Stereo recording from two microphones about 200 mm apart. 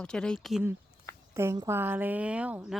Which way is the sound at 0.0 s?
5° left (ahead or behind).